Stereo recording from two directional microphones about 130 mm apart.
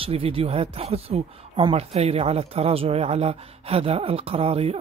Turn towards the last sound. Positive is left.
turn(degrees=-50)  # may be behind; listen again after turning